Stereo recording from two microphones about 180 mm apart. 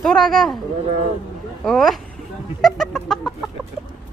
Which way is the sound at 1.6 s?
Centre (ahead or behind).